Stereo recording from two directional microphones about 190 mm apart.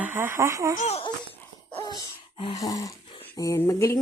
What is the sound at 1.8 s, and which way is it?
Dog, 20° left (ahead or behind).